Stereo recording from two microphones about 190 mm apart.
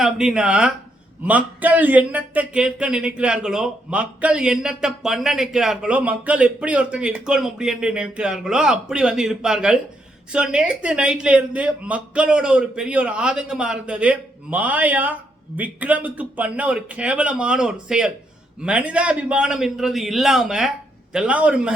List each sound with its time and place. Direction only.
0.0 s speech: 5° right (ahead or behind)